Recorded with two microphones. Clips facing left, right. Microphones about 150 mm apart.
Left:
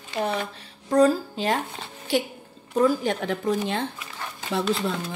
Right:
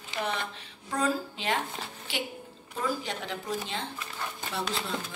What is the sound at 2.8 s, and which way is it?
Speech, 50° left (ahead or behind).